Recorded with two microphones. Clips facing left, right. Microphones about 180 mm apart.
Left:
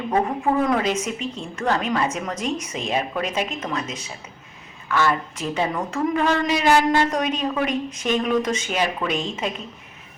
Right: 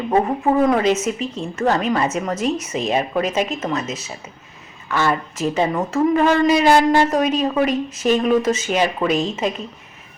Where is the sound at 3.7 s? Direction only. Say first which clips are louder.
Right 4 dB; 5° right (ahead or behind).